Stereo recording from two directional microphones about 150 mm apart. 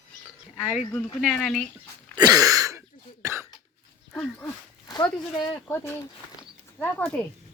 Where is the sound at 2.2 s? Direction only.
25° right (ahead or behind).